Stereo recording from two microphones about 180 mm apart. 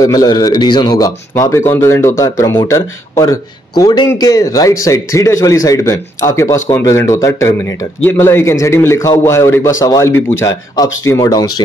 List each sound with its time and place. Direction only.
0.0 s speech: 20° left (ahead or behind)